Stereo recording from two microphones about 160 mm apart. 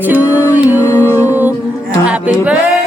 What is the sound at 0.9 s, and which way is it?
Music, 15° left (ahead or behind).